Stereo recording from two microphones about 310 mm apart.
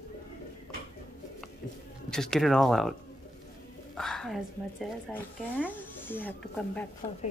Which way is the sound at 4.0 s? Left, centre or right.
Centre.